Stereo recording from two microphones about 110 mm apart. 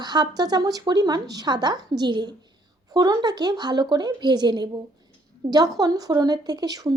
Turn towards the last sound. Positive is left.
turn(degrees=-35)  # may be behind; listen again after turning